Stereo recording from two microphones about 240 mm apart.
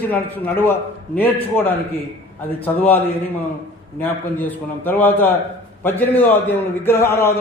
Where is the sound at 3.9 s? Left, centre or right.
Centre.